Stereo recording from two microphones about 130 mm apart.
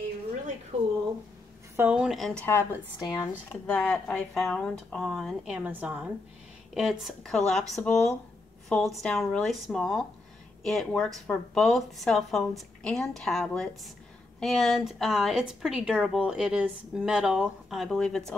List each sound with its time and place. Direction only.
0.7 s a sound: 55° right (ahead or behind)
1.8 s a woman's voice: 10° right (ahead or behind)
2.4 s a woman's voice: 20° left (ahead or behind); by 5.6 s centre (ahead or behind)
5.6 s a woman's voice: 10° right (ahead or behind)
6.7 s a woman's voice: centre (ahead or behind)